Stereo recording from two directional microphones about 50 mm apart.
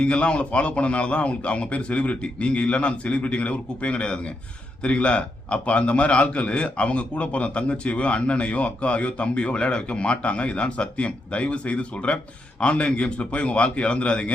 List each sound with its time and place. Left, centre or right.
0.0 s a man's voice: left